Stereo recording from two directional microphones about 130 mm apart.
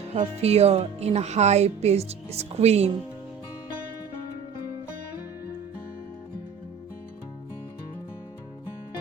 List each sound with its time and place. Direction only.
0.4 s speech: 55° right (ahead or behind)